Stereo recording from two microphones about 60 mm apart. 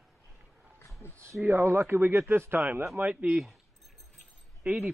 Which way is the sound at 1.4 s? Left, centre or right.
Right.